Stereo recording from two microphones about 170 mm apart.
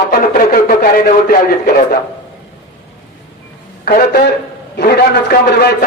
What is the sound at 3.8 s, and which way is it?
A man's voice, 70° left (ahead or behind).